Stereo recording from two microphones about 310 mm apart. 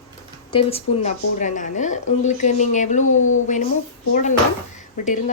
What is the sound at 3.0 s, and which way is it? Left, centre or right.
Speech, left.